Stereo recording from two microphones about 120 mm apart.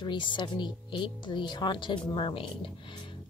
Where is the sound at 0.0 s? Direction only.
40° left (ahead or behind).